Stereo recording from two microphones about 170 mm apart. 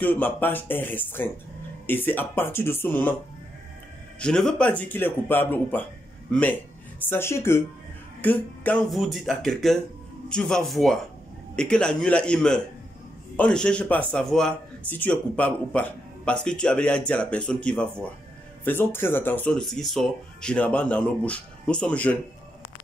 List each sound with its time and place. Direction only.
0.0 s speech: 10° left (ahead or behind)
4.2 s speech: 5° left (ahead or behind)